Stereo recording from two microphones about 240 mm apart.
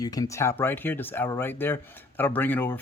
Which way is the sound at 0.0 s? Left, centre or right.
Centre.